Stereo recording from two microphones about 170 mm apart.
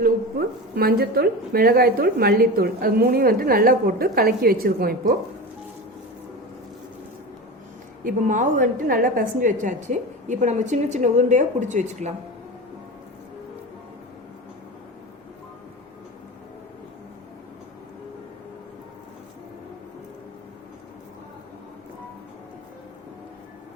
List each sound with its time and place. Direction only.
0.0 s a woman's voice: 65° right (ahead or behind)
8.0 s a woman's voice: 50° right (ahead or behind)